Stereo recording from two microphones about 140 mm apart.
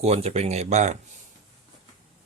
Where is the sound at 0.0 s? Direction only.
50° right (ahead or behind).